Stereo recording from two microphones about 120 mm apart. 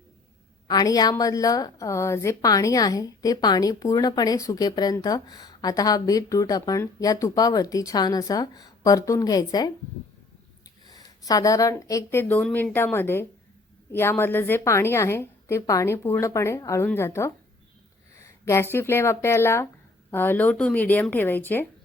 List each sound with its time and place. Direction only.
0.7 s a woman's voice: 30° left (ahead or behind)
10.8 s speech: 30° left (ahead or behind)
12.2 s a woman's voice: 10° left (ahead or behind)
12.7 s a woman's voice: 20° left (ahead or behind)